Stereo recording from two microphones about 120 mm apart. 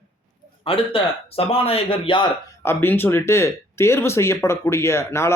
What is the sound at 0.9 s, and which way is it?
Speech, 50° left (ahead or behind).